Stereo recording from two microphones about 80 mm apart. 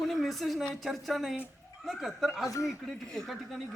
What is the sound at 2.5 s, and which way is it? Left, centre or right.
Speech, left.